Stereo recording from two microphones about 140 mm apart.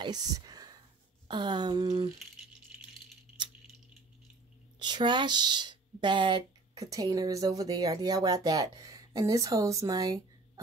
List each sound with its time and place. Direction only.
0.0 s whispering: 30° right (ahead or behind)
1.2 s a sound: 35° right (ahead or behind)
2.7 s rattle: 10° right (ahead or behind)
4.7 s speech: 30° right (ahead or behind)